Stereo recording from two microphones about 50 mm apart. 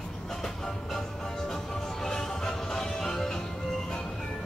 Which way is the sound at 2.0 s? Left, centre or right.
Centre.